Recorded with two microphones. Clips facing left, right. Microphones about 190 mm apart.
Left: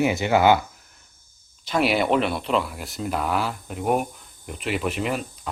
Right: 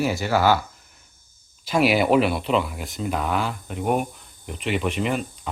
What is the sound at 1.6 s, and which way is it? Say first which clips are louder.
Speech: right 2 dB; 5° right (ahead or behind).